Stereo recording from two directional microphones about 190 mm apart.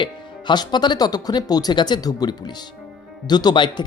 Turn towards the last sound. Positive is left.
turn(degrees=20)  # may be behind; listen again after turning